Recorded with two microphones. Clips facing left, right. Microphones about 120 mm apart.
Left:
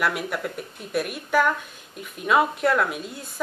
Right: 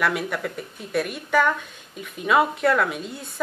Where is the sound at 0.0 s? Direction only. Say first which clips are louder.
Right 1 dB; 5° left (ahead or behind).